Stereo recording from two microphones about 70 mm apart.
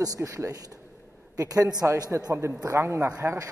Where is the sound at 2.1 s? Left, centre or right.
Right.